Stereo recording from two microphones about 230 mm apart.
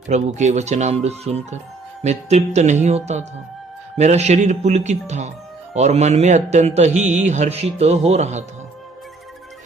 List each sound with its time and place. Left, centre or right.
0.1 s speech: right